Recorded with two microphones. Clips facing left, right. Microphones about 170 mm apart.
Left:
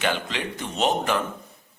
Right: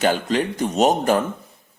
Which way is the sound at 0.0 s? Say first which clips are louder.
Right 7 dB; 40° right (ahead or behind).